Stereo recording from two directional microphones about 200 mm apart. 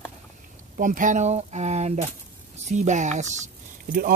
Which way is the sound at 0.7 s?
40° right (ahead or behind).